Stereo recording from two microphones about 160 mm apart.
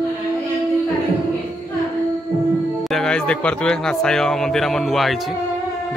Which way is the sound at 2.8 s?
Centre (ahead or behind).